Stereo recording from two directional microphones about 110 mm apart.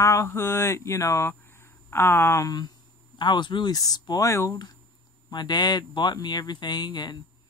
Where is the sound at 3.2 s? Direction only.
45° left (ahead or behind).